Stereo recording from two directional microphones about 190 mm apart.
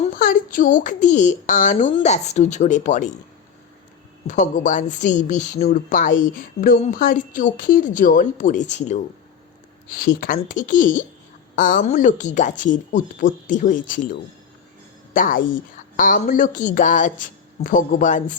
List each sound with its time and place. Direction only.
0.2 s speech: 45° left (ahead or behind)
4.3 s speech: 40° left (ahead or behind)
10.2 s speech: 45° left (ahead or behind)
15.1 s a woman's voice: 45° left (ahead or behind)